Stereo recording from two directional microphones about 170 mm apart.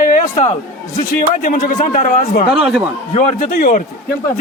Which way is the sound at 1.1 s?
55° left (ahead or behind).